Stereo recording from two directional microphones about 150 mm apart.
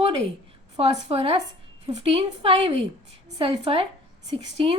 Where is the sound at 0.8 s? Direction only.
40° right (ahead or behind).